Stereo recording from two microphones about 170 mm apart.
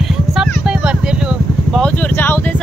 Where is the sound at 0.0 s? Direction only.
Centre (ahead or behind).